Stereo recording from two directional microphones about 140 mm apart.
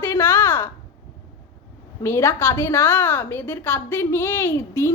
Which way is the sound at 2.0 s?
20° left (ahead or behind).